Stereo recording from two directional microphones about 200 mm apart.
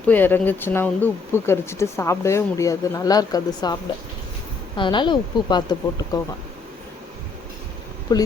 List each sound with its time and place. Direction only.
0.0 s speech: 10° left (ahead or behind)
4.8 s a woman's voice: 25° left (ahead or behind)
8.1 s a woman's voice: 20° left (ahead or behind)